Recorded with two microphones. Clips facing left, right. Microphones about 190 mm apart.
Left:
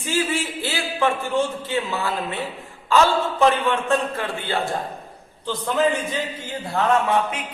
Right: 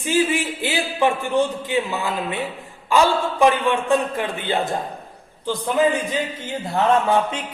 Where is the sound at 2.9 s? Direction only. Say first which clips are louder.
Even; 15° right (ahead or behind).